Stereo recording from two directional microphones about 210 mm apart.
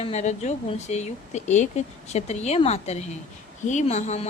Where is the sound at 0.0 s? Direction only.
30° left (ahead or behind).